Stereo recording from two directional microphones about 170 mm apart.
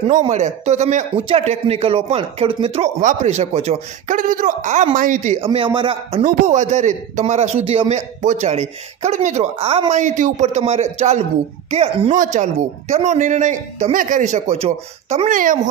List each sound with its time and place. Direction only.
0.3 s speech: 45° right (ahead or behind)
3.0 s a man's voice: 45° right (ahead or behind)
6.2 s a man's voice: 45° right (ahead or behind)